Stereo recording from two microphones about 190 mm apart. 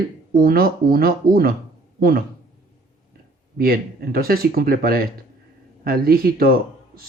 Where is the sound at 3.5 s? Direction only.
50° right (ahead or behind).